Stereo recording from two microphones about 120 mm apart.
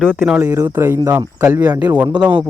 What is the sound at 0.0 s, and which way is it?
Speech, 10° right (ahead or behind).